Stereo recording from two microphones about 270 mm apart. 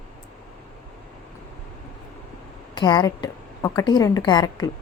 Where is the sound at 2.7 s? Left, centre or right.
Centre.